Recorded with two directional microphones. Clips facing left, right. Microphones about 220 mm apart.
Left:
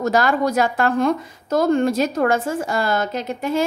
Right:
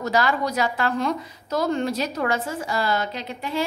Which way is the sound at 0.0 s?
45° left (ahead or behind).